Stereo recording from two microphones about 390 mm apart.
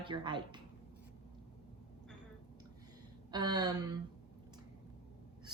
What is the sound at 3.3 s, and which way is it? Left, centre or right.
Speech, centre.